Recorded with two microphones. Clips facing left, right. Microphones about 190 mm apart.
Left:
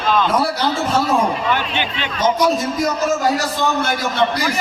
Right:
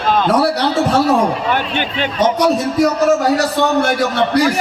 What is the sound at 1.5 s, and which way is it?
A man's voice, 50° right (ahead or behind).